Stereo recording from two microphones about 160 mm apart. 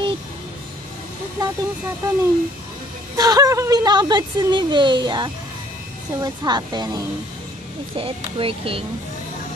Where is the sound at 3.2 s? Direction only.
20° right (ahead or behind).